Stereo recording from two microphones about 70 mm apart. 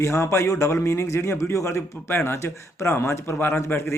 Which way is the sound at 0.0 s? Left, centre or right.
Left.